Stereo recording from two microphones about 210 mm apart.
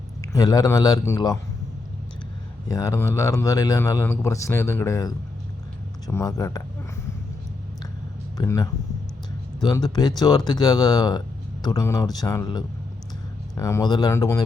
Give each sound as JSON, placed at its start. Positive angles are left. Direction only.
{"t": 0.3, "sound": "speech", "side_deg": 15}
{"t": 2.6, "sound": "speech", "side_deg": 15}
{"t": 8.4, "sound": "speech", "side_deg": 15}